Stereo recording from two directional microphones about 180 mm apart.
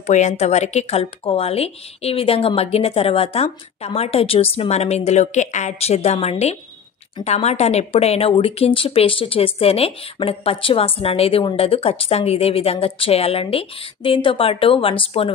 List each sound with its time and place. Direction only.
0.0 s speech: 40° left (ahead or behind)